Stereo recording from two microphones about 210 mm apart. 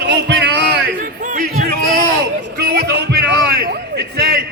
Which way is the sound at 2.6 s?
50° right (ahead or behind).